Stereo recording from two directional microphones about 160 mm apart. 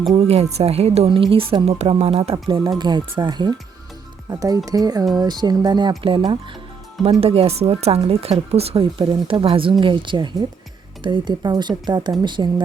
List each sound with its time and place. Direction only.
0.1 s speech: 40° right (ahead or behind)